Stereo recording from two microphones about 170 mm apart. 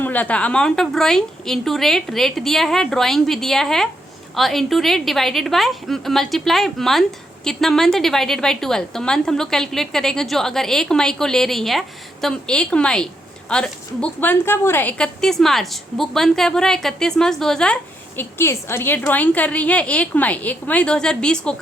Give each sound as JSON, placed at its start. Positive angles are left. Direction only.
{"t": 0.0, "sound": "a woman's voice", "side_deg": 10}
{"t": 18.2, "sound": "a woman's voice", "side_deg": 15}